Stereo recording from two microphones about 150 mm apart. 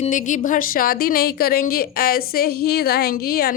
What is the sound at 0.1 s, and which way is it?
A woman's voice, 60° left (ahead or behind).